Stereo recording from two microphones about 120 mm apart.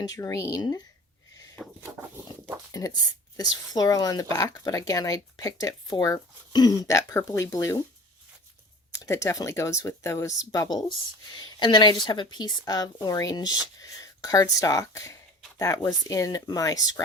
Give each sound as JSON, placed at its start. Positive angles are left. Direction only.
{"t": 0.0, "sound": "speech", "side_deg": 30}
{"t": 1.6, "sound": "a sound", "side_deg": 0}
{"t": 2.7, "sound": "speech", "side_deg": 30}
{"t": 8.9, "sound": "speech", "side_deg": 25}
{"t": 11.3, "sound": "speech", "side_deg": 45}